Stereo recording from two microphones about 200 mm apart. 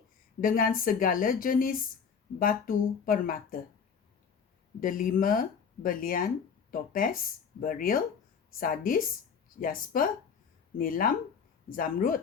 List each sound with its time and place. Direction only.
0.4 s speech: 45° left (ahead or behind)
4.8 s speech: 45° left (ahead or behind)